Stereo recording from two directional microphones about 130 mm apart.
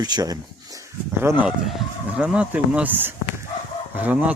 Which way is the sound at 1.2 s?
15° right (ahead or behind).